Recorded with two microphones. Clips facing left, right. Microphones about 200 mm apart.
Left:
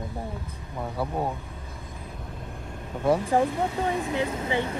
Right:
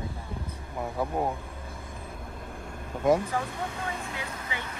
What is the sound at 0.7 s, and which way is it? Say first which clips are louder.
Speech: even; 10° right (ahead or behind).